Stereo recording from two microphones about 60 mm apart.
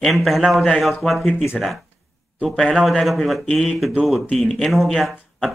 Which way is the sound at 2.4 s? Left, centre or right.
Centre.